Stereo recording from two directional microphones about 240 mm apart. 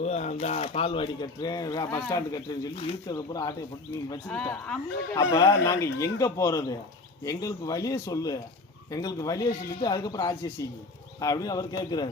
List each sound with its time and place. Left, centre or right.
0.0 s speech: left
4.3 s speech: centre
5.1 s speech: centre